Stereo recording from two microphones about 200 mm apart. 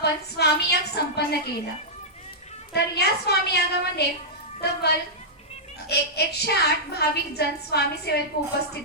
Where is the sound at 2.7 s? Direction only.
55° left (ahead or behind).